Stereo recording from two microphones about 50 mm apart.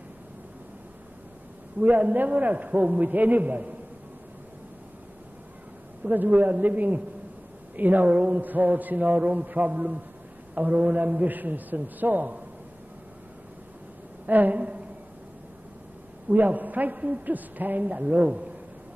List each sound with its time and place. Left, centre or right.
1.8 s a man's voice: right
6.0 s a man's voice: right
14.2 s a man's voice: right
16.3 s a man's voice: right